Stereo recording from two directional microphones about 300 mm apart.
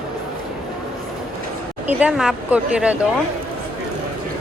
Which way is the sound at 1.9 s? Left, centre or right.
Centre.